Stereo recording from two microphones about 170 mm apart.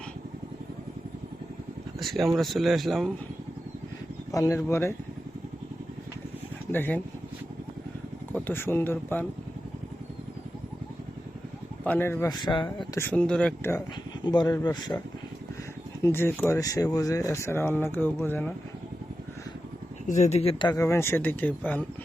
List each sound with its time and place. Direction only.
2.0 s speech: centre (ahead or behind)
4.3 s speech: 20° left (ahead or behind)
6.7 s speech: 10° left (ahead or behind)
8.4 s speech: 15° left (ahead or behind)
11.8 s speech: 10° left (ahead or behind)
12.3 s speech: 25° left (ahead or behind)
12.9 s speech: 10° left (ahead or behind)
14.3 s speech: 25° left (ahead or behind)
16.0 s speech: 15° left (ahead or behind)
20.1 s speech: 45° left (ahead or behind); by 21.8 s 10° left (ahead or behind)